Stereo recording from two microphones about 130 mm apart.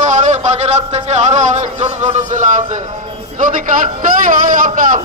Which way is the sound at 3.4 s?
90° right.